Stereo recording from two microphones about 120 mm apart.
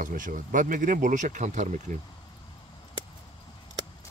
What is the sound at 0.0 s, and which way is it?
Speech, 90° right.